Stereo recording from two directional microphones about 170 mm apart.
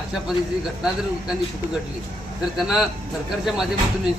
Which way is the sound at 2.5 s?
5° right (ahead or behind).